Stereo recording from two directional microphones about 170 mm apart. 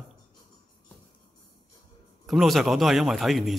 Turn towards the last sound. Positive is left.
turn(degrees=0)  # may be behind; listen again after turning